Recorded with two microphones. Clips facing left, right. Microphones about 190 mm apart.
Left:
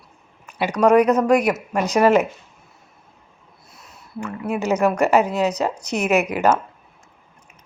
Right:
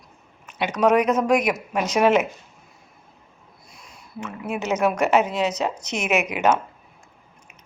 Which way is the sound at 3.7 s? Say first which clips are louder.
Left 1 dB; 5° left (ahead or behind).